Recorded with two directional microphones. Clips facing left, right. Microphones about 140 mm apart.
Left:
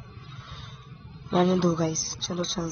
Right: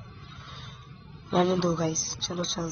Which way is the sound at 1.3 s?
Centre (ahead or behind).